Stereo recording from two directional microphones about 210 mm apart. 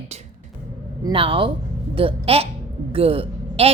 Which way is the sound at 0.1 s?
30° right (ahead or behind).